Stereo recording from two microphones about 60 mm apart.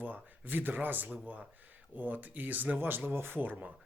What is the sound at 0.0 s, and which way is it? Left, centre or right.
Speech, right.